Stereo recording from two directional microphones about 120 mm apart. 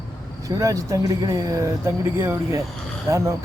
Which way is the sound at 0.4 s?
30° right (ahead or behind).